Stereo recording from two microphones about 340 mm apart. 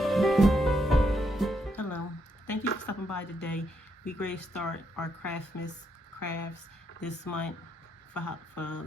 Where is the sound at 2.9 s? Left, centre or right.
Left.